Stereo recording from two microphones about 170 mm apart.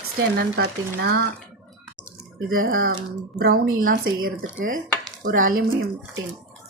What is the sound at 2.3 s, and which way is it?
Speech, 55° right (ahead or behind).